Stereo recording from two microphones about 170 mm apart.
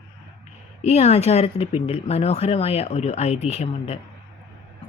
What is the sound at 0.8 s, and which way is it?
Speech, 40° left (ahead or behind).